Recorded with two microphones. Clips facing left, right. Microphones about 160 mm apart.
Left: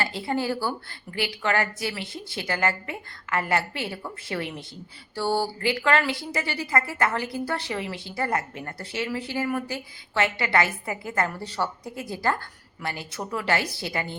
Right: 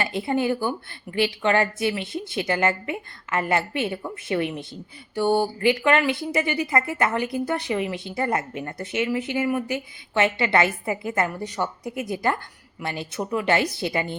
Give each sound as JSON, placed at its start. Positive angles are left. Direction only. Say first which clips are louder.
{"t": 0.0, "sound": "a woman's voice", "louder": "right 3 dB", "side_deg": -20}